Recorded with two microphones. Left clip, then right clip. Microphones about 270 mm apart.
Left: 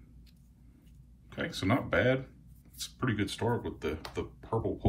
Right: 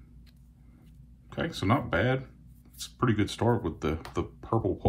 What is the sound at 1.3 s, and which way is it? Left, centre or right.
Speech, centre.